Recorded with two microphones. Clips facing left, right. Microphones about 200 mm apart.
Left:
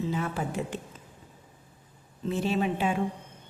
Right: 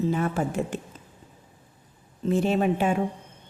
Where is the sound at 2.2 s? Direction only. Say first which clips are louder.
Right 5 dB; 50° right (ahead or behind).